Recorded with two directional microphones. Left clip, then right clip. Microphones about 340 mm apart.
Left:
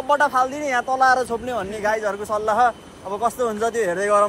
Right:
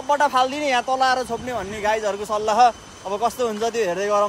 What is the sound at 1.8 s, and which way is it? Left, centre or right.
A man's voice, centre.